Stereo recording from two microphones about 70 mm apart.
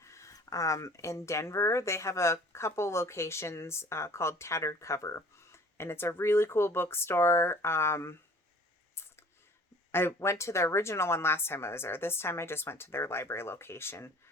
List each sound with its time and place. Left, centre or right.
0.0 s speech: left
9.9 s speech: left